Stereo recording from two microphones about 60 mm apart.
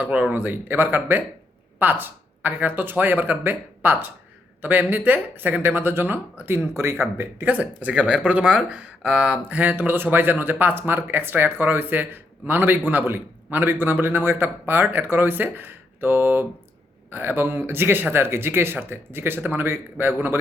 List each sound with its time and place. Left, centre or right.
0.0 s a man's voice: right
6.7 s speech: right
7.4 s speech: right
9.6 s a man's voice: right